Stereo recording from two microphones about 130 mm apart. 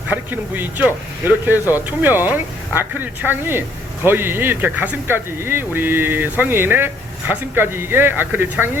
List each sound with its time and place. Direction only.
0.1 s speech: 15° right (ahead or behind)